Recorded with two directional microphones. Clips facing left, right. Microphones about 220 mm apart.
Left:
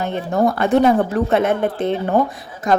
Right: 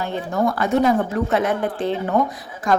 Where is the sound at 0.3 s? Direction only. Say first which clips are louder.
Left 4 dB; 25° left (ahead or behind).